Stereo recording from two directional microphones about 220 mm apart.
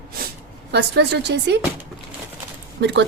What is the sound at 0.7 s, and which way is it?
Speech, 50° right (ahead or behind).